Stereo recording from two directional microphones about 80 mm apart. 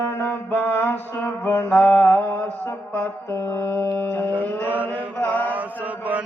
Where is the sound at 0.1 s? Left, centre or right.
Left.